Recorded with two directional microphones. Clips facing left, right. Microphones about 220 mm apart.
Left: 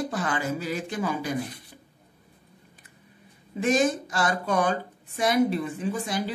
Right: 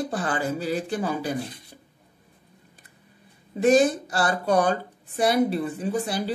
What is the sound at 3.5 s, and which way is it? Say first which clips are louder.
A woman's voice: right 5 dB; 35° right (ahead or behind).